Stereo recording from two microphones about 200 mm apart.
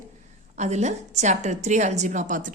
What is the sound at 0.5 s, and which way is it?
A woman's voice, 35° right (ahead or behind).